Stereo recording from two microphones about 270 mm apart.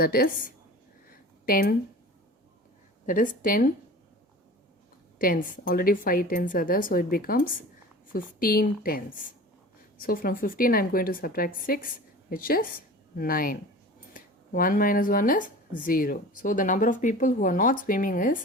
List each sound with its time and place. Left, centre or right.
0.0 s speech: left
1.1 s a sound: left
3.1 s speech: left
5.2 s speech: left